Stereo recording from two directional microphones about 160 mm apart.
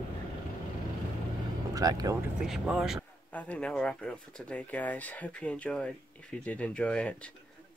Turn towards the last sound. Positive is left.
turn(degrees=5)  # may be behind; listen again after turning